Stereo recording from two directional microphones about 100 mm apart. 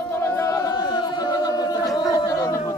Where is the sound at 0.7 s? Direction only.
50° left (ahead or behind).